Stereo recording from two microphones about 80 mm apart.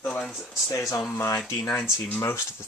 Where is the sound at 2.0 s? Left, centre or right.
Left.